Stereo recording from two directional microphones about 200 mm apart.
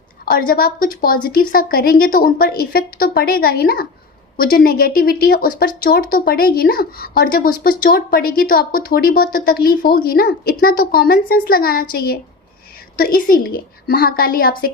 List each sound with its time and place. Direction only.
0.3 s speech: 45° left (ahead or behind)